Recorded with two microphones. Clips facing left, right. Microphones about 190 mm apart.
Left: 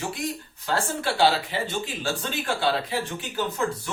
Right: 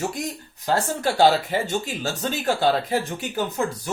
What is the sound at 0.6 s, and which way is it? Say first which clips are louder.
Speech: right 4 dB; 40° right (ahead or behind).